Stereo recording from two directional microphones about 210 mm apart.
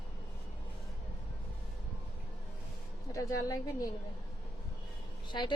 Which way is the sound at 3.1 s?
15° left (ahead or behind).